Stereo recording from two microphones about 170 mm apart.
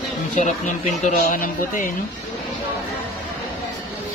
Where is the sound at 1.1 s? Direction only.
50° left (ahead or behind).